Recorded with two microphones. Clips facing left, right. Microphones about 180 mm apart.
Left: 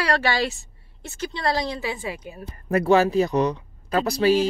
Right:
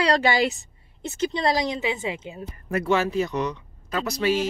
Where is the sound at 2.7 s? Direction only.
40° left (ahead or behind).